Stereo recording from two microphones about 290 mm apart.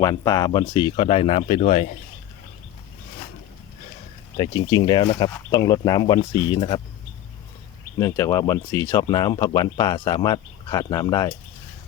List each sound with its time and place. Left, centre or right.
0.0 s speech: centre
4.4 s speech: centre
7.9 s speech: centre